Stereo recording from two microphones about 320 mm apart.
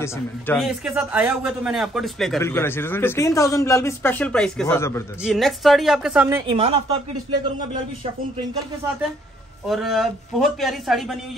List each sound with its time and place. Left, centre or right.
0.0 s a man's voice: centre
9.7 s a man's voice: centre